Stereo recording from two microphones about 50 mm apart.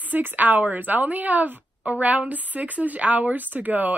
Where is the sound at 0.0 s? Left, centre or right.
Right.